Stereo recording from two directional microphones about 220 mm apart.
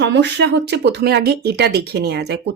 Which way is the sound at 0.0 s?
50° right (ahead or behind).